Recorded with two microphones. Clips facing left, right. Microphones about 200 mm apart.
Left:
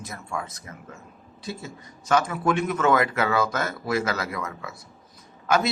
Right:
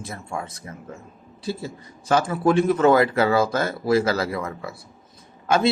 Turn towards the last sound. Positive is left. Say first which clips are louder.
# right 3 dB
turn(degrees=-30)  # may be behind; listen again after turning